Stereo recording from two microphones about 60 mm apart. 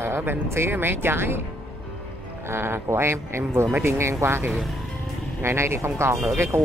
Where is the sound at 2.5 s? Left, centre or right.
Right.